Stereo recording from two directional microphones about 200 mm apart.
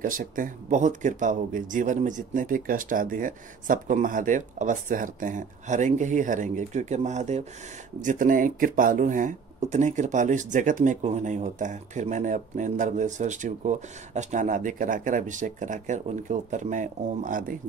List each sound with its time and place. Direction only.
0.0 s speech: 40° right (ahead or behind)